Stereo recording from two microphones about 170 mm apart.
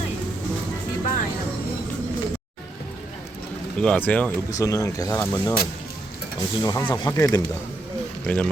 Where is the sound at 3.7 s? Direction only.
5° left (ahead or behind).